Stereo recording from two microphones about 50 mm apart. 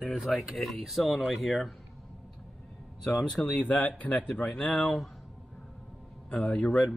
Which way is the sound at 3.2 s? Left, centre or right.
Left.